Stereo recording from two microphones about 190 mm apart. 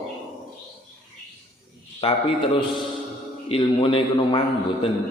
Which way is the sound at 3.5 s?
25° left (ahead or behind).